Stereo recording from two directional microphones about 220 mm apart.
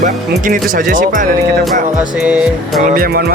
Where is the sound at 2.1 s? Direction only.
5° right (ahead or behind).